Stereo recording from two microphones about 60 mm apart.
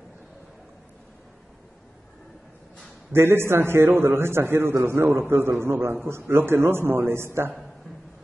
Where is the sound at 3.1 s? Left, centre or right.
Right.